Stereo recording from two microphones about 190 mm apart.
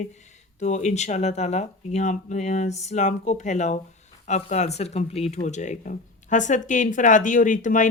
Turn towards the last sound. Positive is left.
turn(degrees=45)  # may be behind; listen again after turning